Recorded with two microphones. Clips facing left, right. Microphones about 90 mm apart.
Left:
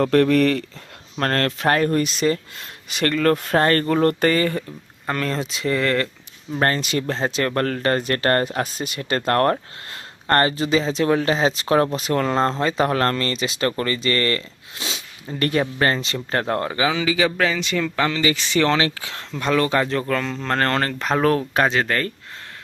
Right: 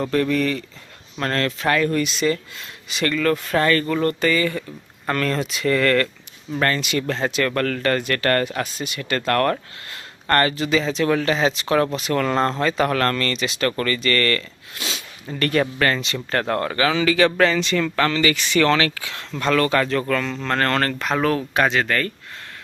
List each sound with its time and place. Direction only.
0.0 s speech: 60° left (ahead or behind)
1.2 s speech: 50° left (ahead or behind)
5.0 s speech: 20° left (ahead or behind)
6.6 s speech: 35° left (ahead or behind)
12.2 s speech: 25° left (ahead or behind)
19.4 s speech: 15° left (ahead or behind)
21.0 s speech: 35° left (ahead or behind)